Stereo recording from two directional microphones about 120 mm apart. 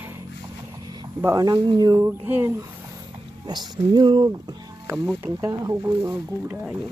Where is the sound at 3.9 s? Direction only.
40° right (ahead or behind).